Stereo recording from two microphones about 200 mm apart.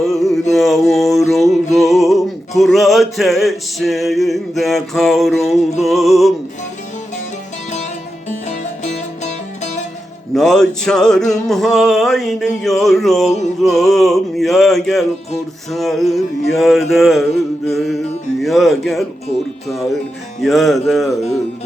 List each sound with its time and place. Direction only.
0.0 s a sound: centre (ahead or behind)
0.5 s mantra: centre (ahead or behind)
1.7 s music: centre (ahead or behind)
8.3 s music: 35° left (ahead or behind)
10.3 s music: centre (ahead or behind)